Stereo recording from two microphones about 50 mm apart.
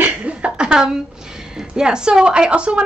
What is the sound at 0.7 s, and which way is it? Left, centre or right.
A woman's voice, centre.